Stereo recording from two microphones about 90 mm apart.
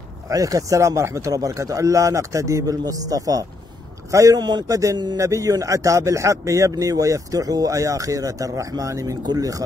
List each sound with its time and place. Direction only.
0.3 s speech: 40° right (ahead or behind)
4.4 s a man's voice: 50° right (ahead or behind)